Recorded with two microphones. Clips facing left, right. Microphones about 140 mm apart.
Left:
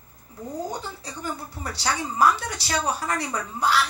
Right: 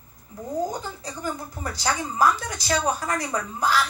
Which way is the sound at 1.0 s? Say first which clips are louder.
Right 2 dB; 45° right (ahead or behind).